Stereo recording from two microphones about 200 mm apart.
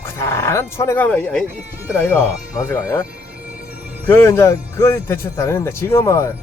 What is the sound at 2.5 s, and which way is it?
Speech, 15° left (ahead or behind).